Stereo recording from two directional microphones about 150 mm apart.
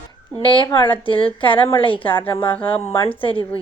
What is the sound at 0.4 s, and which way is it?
Speech, 35° left (ahead or behind).